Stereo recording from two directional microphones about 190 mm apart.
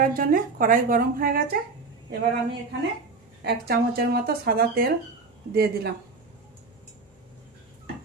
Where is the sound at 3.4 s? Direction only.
55° right (ahead or behind).